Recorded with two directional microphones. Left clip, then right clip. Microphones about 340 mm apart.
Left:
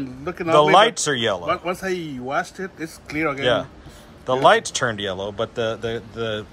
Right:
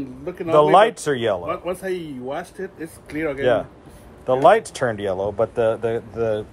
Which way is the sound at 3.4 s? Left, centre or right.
Centre.